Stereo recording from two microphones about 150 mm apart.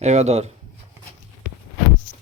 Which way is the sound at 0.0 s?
45° right (ahead or behind).